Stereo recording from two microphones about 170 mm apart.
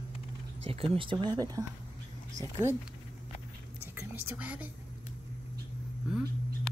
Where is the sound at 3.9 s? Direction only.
15° right (ahead or behind).